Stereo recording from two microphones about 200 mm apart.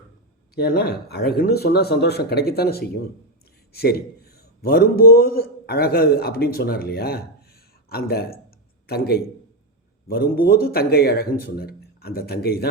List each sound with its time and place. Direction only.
0.5 s a man's voice: 50° left (ahead or behind)